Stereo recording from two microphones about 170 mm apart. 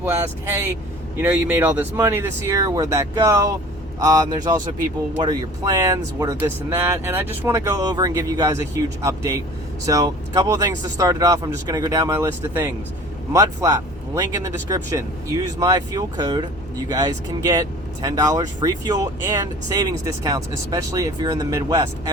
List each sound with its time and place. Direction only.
0.0 s speech: 15° right (ahead or behind)